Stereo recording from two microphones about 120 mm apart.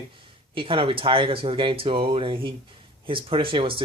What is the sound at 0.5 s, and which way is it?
Speech, 45° right (ahead or behind).